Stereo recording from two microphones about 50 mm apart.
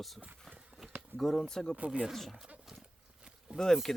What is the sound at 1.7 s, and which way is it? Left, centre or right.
Speech, right.